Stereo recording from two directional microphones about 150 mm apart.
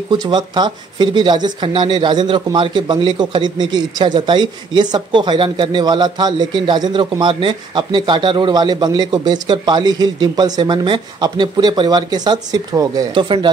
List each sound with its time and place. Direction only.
0.1 s speech: 30° right (ahead or behind)